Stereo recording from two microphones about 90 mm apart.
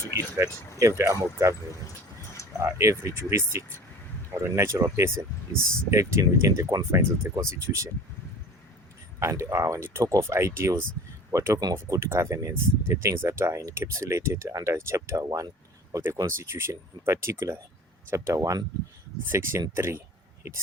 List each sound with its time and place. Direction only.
0.1 s speech: 35° right (ahead or behind)
2.6 s speech: 30° right (ahead or behind)
9.2 s speech: 30° right (ahead or behind)
15.9 s speech: 25° right (ahead or behind)